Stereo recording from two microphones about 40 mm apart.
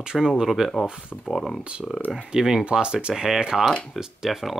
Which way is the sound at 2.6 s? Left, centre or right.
Right.